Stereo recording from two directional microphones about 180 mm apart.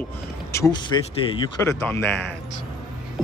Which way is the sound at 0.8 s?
25° left (ahead or behind).